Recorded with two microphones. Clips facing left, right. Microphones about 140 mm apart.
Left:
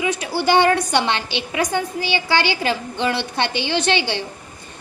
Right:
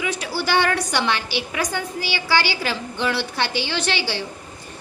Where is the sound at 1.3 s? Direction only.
55° left (ahead or behind).